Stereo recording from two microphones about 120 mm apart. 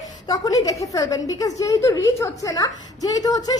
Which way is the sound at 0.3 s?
30° left (ahead or behind).